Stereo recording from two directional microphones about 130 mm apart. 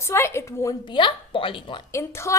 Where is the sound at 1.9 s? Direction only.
20° left (ahead or behind).